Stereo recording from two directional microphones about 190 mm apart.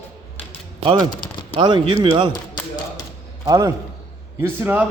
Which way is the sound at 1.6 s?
25° right (ahead or behind).